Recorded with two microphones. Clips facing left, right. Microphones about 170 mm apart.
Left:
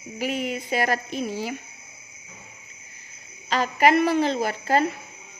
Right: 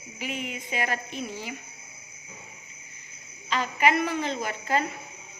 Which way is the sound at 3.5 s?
35° left (ahead or behind).